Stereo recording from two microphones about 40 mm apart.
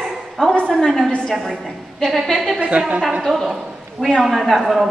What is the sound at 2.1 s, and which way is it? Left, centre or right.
Speech, centre.